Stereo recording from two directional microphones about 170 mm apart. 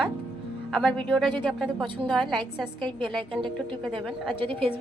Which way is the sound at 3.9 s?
30° right (ahead or behind).